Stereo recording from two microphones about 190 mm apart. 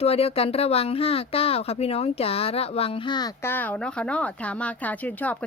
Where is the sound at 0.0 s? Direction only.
30° left (ahead or behind).